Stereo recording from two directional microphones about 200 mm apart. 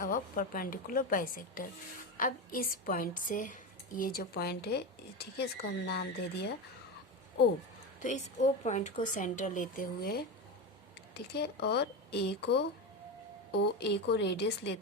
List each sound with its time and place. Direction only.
0.0 s a woman's voice: 45° left (ahead or behind)
8.6 s speech: 35° left (ahead or behind); by 14.8 s 60° left (ahead or behind)